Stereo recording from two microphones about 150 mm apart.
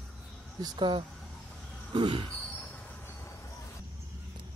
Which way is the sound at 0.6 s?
30° right (ahead or behind).